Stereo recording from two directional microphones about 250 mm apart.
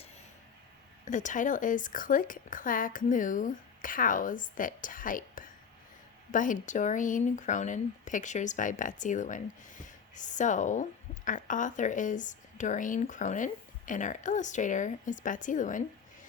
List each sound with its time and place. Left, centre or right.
1.0 s a woman's voice: left